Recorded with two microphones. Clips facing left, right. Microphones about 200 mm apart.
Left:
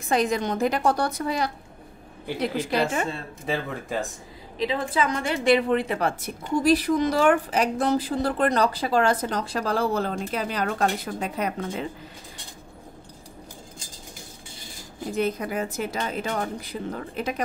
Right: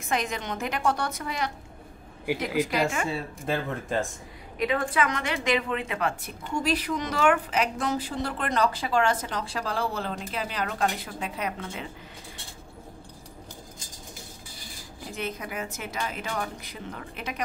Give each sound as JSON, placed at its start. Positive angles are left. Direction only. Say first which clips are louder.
{"t": 0.1, "sound": "a woman's voice", "louder": "left 6 dB", "side_deg": 35}
{"t": 3.1, "sound": "speech", "louder": "even", "side_deg": -5}
{"t": 4.6, "sound": "a woman's voice", "louder": "left 1 dB", "side_deg": 30}
{"t": 15.1, "sound": "a woman's voice", "louder": "left 8 dB", "side_deg": 35}